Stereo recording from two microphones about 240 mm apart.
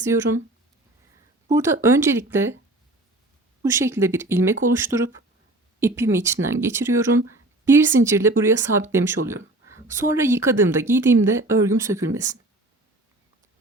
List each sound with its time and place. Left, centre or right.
0.0 s speech: centre
1.5 s speech: centre
3.6 s speech: centre